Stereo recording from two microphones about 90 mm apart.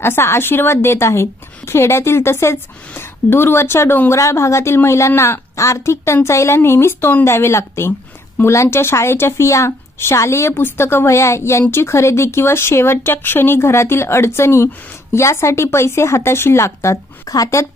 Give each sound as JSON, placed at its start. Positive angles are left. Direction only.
{"t": 0.0, "sound": "speech", "side_deg": 25}